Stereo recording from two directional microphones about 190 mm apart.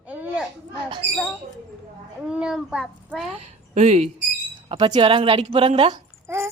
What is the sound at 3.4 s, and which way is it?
Speech, 35° right (ahead or behind).